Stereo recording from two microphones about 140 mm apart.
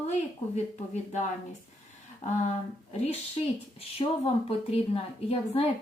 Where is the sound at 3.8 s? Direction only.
45° left (ahead or behind).